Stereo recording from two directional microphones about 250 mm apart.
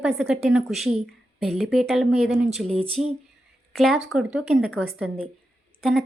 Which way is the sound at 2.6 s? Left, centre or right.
Right.